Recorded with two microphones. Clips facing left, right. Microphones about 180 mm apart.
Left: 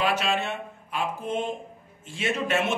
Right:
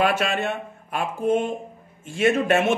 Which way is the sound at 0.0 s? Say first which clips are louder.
Right 4 dB; 55° right (ahead or behind).